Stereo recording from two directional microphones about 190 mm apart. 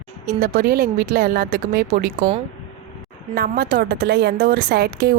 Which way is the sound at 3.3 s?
50° right (ahead or behind).